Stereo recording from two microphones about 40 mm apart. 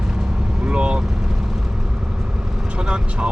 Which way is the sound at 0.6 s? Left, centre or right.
Right.